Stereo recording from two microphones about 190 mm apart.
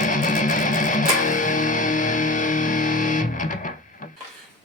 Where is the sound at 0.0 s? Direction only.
45° left (ahead or behind).